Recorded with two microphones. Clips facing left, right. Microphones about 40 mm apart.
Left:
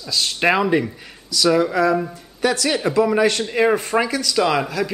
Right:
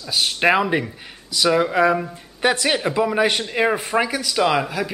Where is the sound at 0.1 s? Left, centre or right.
Centre.